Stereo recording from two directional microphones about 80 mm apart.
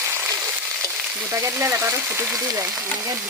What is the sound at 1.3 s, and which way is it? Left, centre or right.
Speech, right.